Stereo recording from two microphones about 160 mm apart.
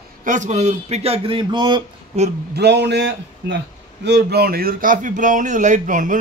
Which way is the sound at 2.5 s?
90° right.